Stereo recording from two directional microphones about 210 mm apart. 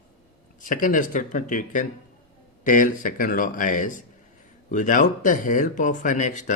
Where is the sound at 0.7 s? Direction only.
40° left (ahead or behind).